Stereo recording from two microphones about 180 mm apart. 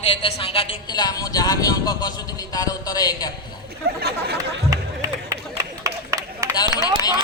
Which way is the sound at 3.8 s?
60° right (ahead or behind).